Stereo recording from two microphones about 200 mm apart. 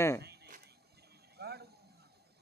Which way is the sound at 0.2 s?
55° right (ahead or behind).